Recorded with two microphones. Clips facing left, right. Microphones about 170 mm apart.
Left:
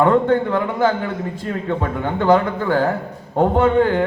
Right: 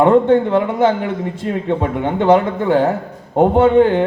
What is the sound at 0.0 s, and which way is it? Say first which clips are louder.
A man's voice: right 4 dB; 20° right (ahead or behind).